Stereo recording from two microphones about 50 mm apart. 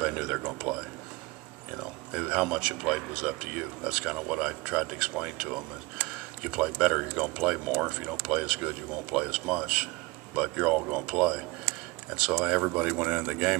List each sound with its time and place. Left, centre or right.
0.0 s a sound: centre
0.4 s a man's voice: right
12.4 s speech: centre